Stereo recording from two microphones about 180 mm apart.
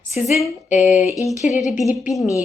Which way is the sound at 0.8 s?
10° right (ahead or behind).